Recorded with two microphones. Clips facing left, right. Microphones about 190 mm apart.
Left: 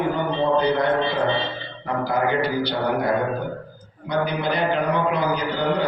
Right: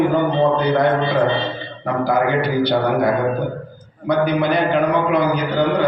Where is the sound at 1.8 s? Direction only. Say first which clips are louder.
Right 5 dB; 55° right (ahead or behind).